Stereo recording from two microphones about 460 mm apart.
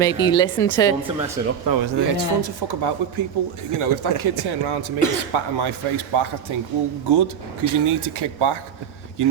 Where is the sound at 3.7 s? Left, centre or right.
Right.